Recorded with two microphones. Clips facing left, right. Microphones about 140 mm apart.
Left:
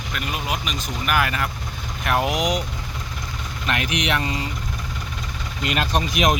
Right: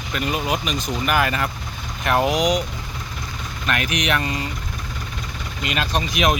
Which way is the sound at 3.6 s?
20° left (ahead or behind).